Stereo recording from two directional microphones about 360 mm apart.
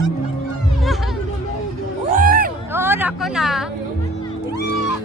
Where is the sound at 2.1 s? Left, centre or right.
Right.